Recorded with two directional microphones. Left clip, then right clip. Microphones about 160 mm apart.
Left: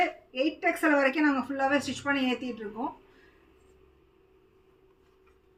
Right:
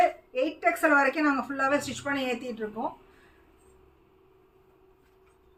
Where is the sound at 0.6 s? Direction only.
20° right (ahead or behind).